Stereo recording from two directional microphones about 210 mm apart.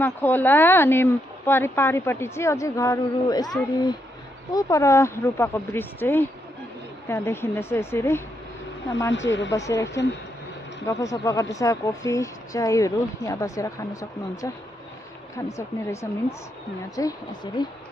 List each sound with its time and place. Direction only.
0.0 s speech: 10° left (ahead or behind)
9.1 s speech: 60° left (ahead or behind)
9.5 s speech: 15° left (ahead or behind)
10.9 s speech: 15° left (ahead or behind)
15.5 s speech: 15° left (ahead or behind)